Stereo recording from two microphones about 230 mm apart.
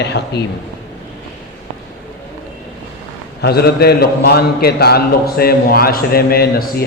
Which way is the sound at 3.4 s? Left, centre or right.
Left.